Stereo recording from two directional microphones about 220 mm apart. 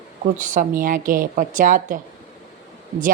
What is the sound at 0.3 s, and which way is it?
A woman's voice, 35° right (ahead or behind).